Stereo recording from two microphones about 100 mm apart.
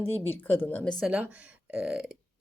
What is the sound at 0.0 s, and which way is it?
Speech, 20° left (ahead or behind).